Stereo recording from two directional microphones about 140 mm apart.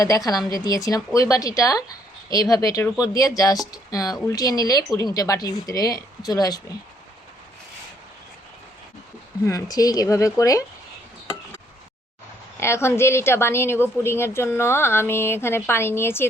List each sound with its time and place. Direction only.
0.0 s speech: 25° left (ahead or behind)
9.5 s speech: 25° left (ahead or behind)
12.5 s speech: 20° left (ahead or behind)